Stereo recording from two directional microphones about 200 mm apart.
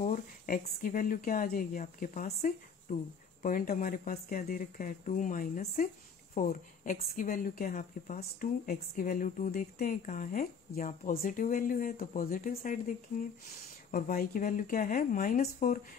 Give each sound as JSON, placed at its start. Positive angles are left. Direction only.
{"t": 0.0, "sound": "speech", "side_deg": 40}
{"t": 13.9, "sound": "speech", "side_deg": 45}